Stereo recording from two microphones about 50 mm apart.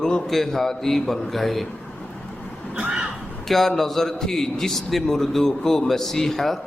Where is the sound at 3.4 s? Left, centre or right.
Centre.